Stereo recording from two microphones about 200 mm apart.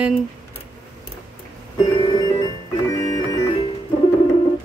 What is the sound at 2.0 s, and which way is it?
Music, 20° left (ahead or behind).